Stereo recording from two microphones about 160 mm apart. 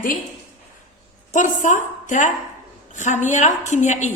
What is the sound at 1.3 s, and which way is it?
A woman's voice, 50° left (ahead or behind).